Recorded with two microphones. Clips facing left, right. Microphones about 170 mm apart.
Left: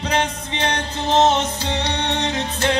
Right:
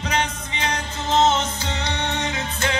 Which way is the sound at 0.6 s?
30° left (ahead or behind).